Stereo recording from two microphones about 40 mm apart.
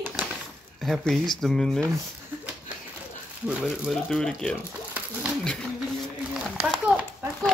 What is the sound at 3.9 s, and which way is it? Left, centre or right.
Speech, centre.